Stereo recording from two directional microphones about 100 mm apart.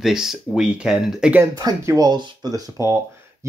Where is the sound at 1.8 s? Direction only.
40° right (ahead or behind).